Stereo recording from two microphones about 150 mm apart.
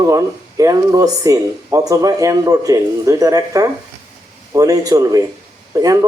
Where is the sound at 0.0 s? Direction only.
20° right (ahead or behind).